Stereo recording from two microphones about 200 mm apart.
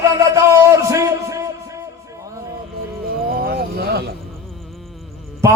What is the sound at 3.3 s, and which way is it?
Clip-clop, 50° right (ahead or behind).